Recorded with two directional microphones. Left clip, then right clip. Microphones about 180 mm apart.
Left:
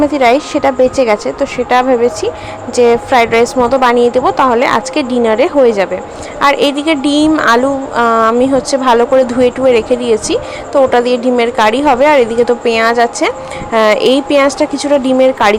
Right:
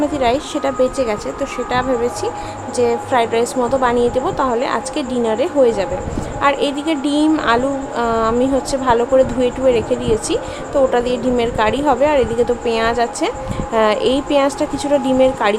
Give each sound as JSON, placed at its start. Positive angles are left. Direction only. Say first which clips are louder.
{"t": 0.1, "sound": "a woman's voice", "louder": "left 7 dB", "side_deg": 25}